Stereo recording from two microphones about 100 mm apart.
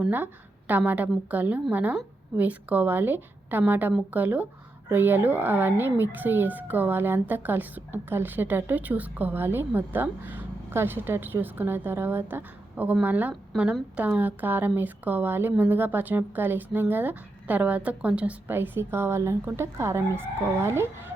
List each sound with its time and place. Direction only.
0.7 s a woman's voice: 15° right (ahead or behind)
13.5 s a woman's voice: centre (ahead or behind)
13.9 s a woman's voice: 15° right (ahead or behind)